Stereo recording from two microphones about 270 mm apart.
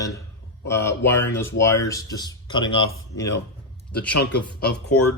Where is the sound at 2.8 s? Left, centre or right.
Left.